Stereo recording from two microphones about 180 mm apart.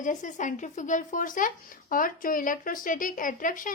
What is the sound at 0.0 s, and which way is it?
Speech, 45° left (ahead or behind).